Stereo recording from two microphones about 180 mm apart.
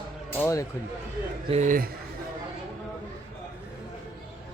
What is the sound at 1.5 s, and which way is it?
Speech, 45° right (ahead or behind).